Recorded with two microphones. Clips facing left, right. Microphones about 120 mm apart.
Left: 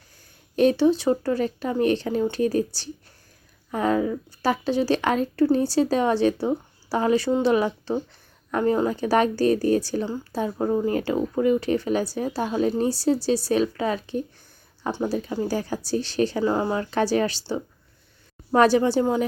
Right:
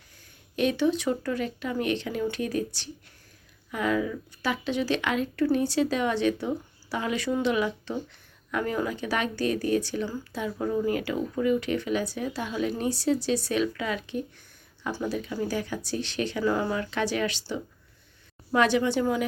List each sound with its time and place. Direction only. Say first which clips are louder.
0.5 s a woman's voice: left 6 dB; 40° left (ahead or behind)
18.5 s a woman's voice: left 5 dB; 40° left (ahead or behind)